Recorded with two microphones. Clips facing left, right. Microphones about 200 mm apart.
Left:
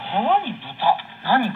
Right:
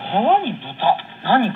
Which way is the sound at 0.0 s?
30° right (ahead or behind).